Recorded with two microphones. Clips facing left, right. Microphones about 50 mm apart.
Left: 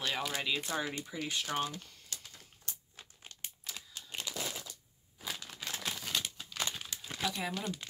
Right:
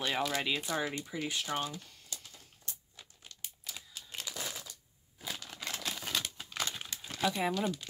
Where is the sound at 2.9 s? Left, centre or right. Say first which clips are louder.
Left 1 dB; left.